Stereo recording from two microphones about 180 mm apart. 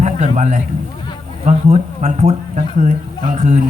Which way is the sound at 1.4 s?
40° right (ahead or behind).